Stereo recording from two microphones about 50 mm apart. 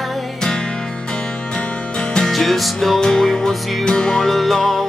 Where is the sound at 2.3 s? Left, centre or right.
Centre.